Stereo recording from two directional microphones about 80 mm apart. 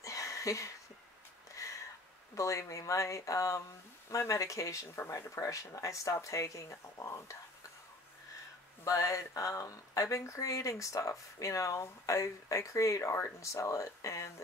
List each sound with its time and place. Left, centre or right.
0.0 s a sound: left
2.3 s speech: left
8.8 s speech: left